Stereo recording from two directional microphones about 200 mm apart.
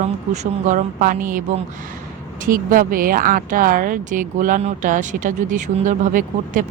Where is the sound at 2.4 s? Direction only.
45° right (ahead or behind).